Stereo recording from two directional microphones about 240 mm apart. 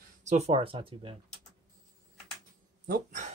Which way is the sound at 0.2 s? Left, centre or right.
Right.